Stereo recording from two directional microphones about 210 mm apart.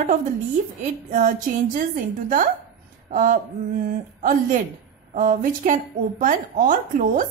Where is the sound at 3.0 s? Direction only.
35° right (ahead or behind).